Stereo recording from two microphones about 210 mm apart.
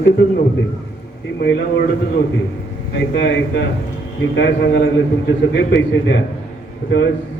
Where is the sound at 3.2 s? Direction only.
55° left (ahead or behind).